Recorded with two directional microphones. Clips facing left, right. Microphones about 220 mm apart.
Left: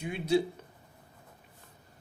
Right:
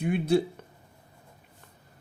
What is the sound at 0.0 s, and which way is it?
Speech, 55° right (ahead or behind).